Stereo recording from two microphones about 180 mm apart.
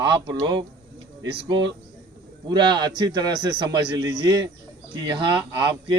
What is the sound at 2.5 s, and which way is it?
A man's voice, 25° right (ahead or behind).